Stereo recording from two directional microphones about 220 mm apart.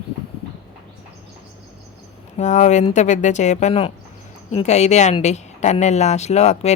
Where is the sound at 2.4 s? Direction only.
35° left (ahead or behind).